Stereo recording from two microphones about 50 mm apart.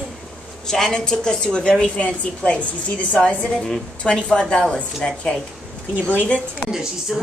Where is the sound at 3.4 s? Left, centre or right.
Centre.